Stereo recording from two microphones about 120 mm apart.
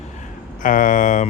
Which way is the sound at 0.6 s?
90° left.